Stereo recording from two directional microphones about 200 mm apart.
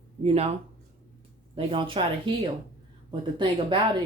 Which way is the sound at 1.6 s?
25° right (ahead or behind).